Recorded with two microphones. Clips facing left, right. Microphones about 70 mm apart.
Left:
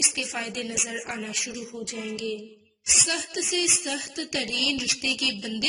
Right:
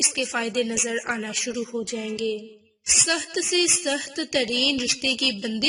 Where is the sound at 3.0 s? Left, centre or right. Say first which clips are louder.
Right 6 dB; right.